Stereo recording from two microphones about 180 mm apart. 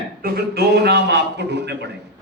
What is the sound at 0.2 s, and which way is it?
A man's voice, 60° right (ahead or behind).